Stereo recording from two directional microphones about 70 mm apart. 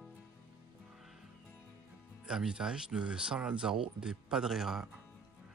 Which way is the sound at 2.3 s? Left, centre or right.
Centre.